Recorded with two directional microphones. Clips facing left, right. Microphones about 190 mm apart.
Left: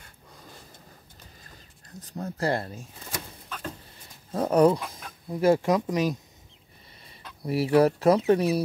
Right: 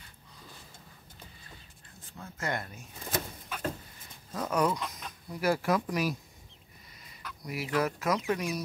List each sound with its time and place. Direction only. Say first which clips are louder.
2.0 s speech: left 10 dB; 40° left (ahead or behind)
3.5 s a sound: right 2 dB; 10° right (ahead or behind)
4.3 s speech: left 9 dB; 30° left (ahead or behind)
7.2 s speech: left 10 dB; 30° left (ahead or behind)